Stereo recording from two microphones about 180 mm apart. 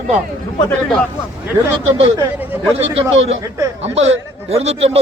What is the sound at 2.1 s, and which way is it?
Speech, 10° right (ahead or behind).